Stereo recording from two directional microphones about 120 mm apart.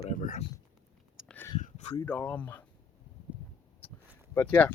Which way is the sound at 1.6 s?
75° left (ahead or behind).